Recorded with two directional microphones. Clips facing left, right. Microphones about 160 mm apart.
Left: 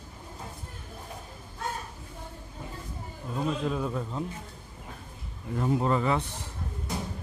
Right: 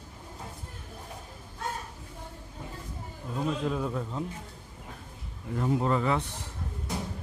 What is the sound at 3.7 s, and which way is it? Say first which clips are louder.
Speech: even; 5° left (ahead or behind).